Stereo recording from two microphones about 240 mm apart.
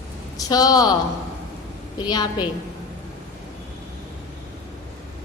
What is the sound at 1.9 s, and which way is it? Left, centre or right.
Speech, centre.